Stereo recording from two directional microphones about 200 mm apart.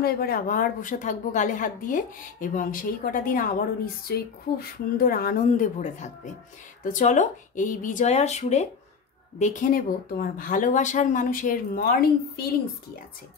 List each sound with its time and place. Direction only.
0.0 s speech: 50° left (ahead or behind)